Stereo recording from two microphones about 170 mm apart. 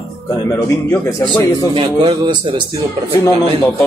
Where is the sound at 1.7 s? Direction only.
30° right (ahead or behind).